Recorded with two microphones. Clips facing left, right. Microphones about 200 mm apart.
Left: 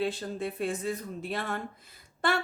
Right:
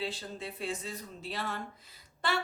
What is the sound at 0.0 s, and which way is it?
A woman's voice, 55° left (ahead or behind).